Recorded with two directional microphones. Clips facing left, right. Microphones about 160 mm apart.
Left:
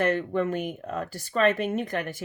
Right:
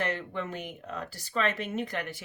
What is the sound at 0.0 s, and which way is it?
Speech, 50° left (ahead or behind).